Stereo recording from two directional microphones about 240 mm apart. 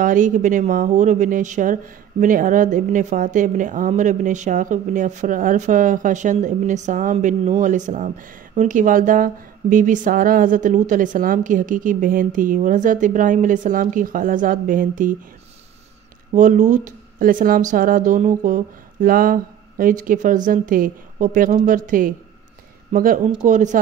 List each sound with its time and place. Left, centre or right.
0.0 s speech: right
16.3 s speech: right